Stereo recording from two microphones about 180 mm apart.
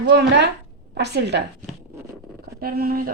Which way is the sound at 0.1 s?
70° right (ahead or behind).